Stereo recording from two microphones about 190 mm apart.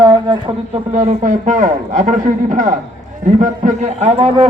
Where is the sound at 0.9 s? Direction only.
35° right (ahead or behind).